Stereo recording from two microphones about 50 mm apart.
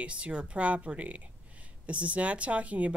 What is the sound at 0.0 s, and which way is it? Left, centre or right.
Speech, right.